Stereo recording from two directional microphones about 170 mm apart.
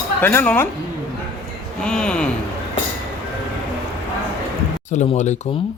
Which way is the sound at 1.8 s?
5° left (ahead or behind).